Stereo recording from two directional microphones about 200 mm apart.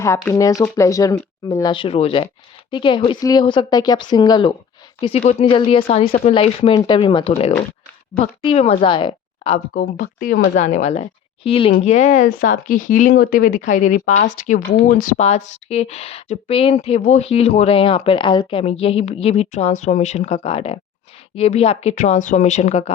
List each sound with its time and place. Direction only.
0.3 s speech: 15° left (ahead or behind)
6.1 s speech: 45° left (ahead or behind)
6.3 s a woman's voice: 30° left (ahead or behind)
9.7 s speech: 40° left (ahead or behind)